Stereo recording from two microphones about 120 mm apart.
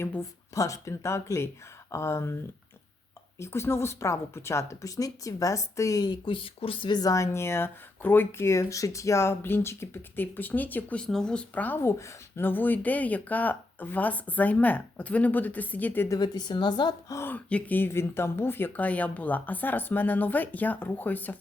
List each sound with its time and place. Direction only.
0.5 s speech: 25° left (ahead or behind)
16.1 s a woman's voice: 35° left (ahead or behind)
17.2 s speech: 15° left (ahead or behind)